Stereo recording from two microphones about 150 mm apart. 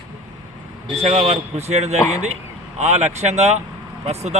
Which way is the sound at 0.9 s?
45° right (ahead or behind).